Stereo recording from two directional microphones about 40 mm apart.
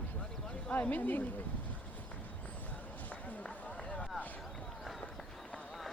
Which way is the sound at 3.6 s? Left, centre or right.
Left.